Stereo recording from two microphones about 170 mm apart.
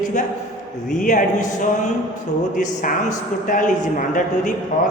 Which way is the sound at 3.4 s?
50° left (ahead or behind).